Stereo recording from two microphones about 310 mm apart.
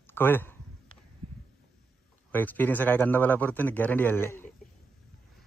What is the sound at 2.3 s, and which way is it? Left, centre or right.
A man's voice, centre.